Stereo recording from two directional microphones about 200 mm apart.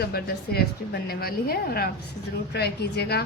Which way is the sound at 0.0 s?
50° left (ahead or behind).